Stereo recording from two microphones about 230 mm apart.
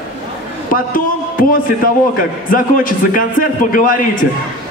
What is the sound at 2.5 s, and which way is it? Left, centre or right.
A man's voice, left.